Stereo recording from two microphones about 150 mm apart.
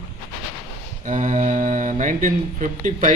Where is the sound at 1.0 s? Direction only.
60° right (ahead or behind).